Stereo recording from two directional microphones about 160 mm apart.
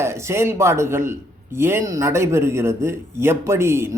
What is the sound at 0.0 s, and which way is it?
Speech, 15° right (ahead or behind).